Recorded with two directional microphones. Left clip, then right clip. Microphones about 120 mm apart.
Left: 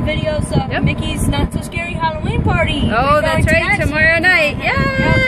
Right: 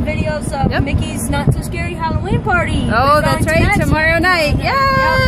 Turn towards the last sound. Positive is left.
turn(degrees=-15)  # may be behind; listen again after turning